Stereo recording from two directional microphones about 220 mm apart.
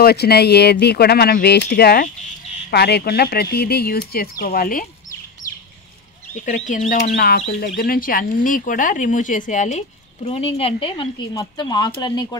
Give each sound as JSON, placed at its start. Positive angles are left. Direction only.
{"t": 0.0, "sound": "speech", "side_deg": 45}
{"t": 6.3, "sound": "speech", "side_deg": 35}